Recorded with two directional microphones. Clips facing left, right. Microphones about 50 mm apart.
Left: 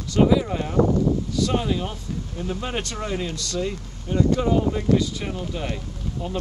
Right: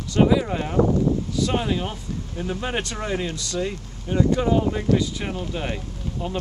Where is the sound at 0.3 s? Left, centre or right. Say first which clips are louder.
Even; centre.